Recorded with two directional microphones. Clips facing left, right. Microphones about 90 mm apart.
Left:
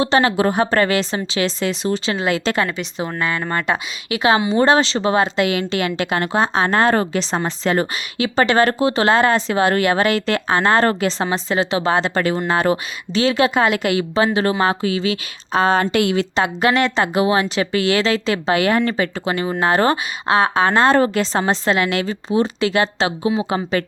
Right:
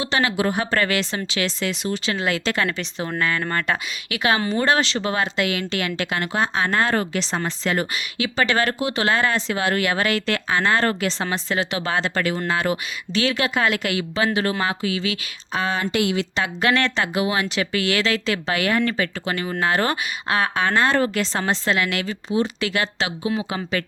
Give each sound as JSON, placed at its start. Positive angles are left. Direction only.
{"t": 0.0, "sound": "speech", "side_deg": 35}
{"t": 2.6, "sound": "speech", "side_deg": 10}
{"t": 16.3, "sound": "speech", "side_deg": 30}
{"t": 17.0, "sound": "speech", "side_deg": 30}